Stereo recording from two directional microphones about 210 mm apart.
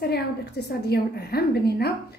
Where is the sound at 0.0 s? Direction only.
50° left (ahead or behind).